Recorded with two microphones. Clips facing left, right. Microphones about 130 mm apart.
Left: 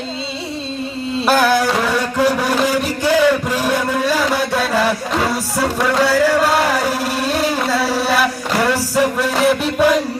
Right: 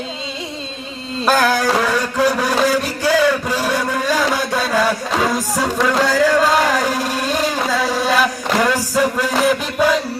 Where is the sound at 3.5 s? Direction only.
10° left (ahead or behind).